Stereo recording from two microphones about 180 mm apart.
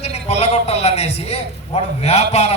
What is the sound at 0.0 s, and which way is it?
A man's voice, 35° left (ahead or behind).